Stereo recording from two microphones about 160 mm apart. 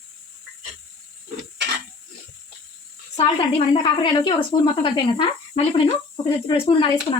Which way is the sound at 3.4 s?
30° left (ahead or behind).